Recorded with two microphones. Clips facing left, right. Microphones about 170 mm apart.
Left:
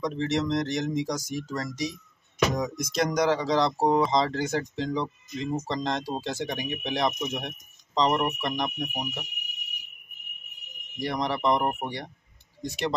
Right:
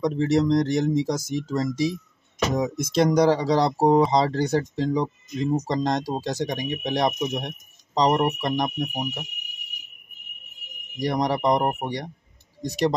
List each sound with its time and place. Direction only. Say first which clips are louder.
0.0 s speech: right 6 dB; 35° right (ahead or behind)
11.0 s speech: right 5 dB; 40° right (ahead or behind)